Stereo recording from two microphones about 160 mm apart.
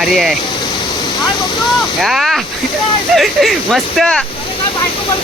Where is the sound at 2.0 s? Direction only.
Centre (ahead or behind).